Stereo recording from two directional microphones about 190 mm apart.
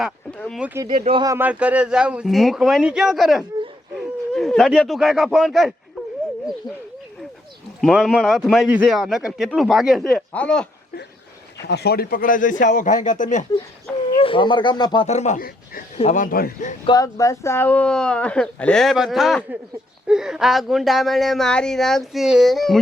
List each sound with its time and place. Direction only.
0.0 s a sound: centre (ahead or behind)
0.6 s speech: 10° right (ahead or behind)
0.9 s speech: 45° right (ahead or behind)
1.1 s a man's voice: 20° right (ahead or behind); by 5.7 s centre (ahead or behind)
7.8 s a man's voice: centre (ahead or behind)
11.6 s a man's voice: 60° left (ahead or behind); by 13.4 s 40° left (ahead or behind)
14.2 s speech: 25° left (ahead or behind)
15.0 s speech: 35° left (ahead or behind)
16.0 s a man's voice: 40° left (ahead or behind)
16.8 s a man's voice: 20° left (ahead or behind); by 22.8 s centre (ahead or behind)